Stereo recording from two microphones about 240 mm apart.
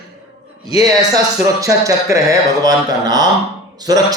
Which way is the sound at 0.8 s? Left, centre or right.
Centre.